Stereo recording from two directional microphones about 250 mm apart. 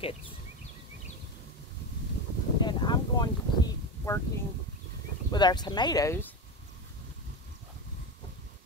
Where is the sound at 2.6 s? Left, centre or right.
Centre.